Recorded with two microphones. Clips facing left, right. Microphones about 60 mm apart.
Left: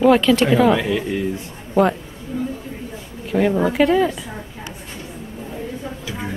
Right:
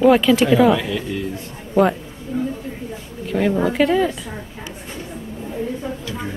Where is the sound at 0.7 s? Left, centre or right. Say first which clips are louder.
Left 2 dB; centre.